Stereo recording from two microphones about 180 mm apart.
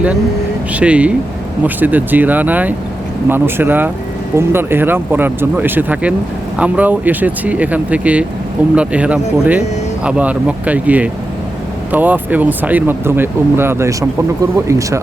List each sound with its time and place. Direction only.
0.7 s speech: 5° right (ahead or behind)